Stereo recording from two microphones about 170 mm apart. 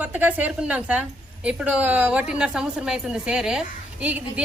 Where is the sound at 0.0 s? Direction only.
10° right (ahead or behind).